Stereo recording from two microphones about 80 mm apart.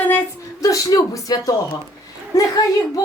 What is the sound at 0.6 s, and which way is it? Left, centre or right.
Speech, left.